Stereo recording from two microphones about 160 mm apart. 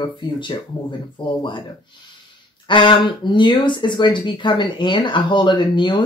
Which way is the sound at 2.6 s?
30° left (ahead or behind).